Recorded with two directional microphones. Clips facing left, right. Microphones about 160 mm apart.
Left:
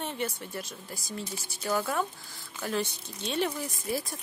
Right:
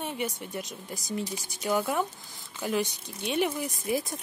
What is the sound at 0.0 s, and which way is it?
A woman's voice, 10° right (ahead or behind).